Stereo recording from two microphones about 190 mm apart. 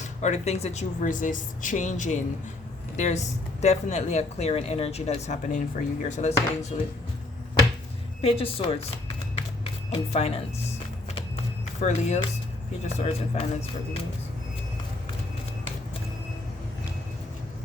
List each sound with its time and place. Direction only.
0.0 s speech: 40° left (ahead or behind)
8.2 s speech: 30° left (ahead or behind)
9.9 s speech: 35° left (ahead or behind)
11.8 s speech: 35° left (ahead or behind)